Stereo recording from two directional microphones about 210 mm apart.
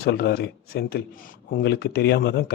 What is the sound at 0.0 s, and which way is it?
A man's voice, 50° left (ahead or behind).